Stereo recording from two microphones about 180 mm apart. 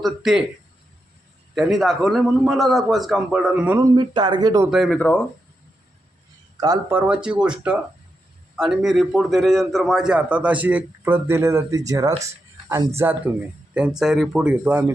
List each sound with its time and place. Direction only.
0.0 s a man's voice: centre (ahead or behind)
1.5 s a man's voice: centre (ahead or behind); by 4.7 s 20° right (ahead or behind)
4.7 s speech: 5° left (ahead or behind)
6.9 s a man's voice: 5° right (ahead or behind)
12.2 s music: 15° right (ahead or behind)
13.0 s a man's voice: 10° right (ahead or behind)